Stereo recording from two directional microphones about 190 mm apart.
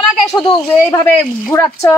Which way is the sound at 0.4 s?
20° left (ahead or behind).